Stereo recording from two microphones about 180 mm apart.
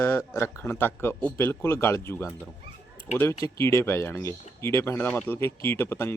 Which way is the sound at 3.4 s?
15° left (ahead or behind).